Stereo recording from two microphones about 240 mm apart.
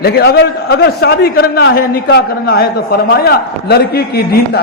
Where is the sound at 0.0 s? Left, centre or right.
Left.